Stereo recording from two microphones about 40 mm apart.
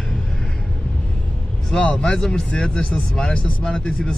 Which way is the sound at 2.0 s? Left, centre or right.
Centre.